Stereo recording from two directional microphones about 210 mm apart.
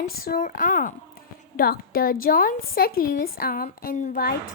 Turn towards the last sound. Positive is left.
turn(degrees=40)  # may be behind; listen again after turning